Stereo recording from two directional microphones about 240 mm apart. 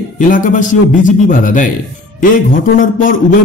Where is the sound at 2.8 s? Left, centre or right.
Left.